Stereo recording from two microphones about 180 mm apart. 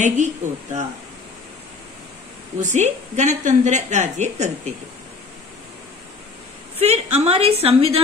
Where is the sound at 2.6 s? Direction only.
40° right (ahead or behind).